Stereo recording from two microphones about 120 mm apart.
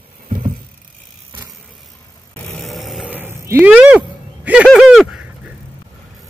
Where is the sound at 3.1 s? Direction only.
20° right (ahead or behind); by 5.5 s 5° right (ahead or behind).